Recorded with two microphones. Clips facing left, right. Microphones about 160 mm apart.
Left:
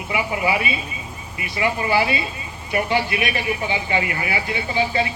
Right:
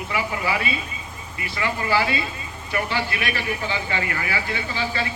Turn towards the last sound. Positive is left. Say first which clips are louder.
# left 5 dB
turn(degrees=20)  # may be behind; listen again after turning